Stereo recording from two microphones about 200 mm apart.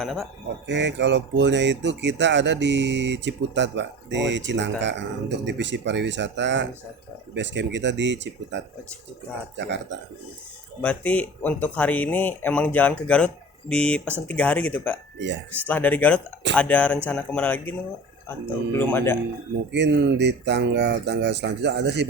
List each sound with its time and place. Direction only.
0.0 s speech: centre (ahead or behind)
0.7 s speech: 60° right (ahead or behind)
10.8 s speech: 5° left (ahead or behind)
19.7 s speech: 60° right (ahead or behind)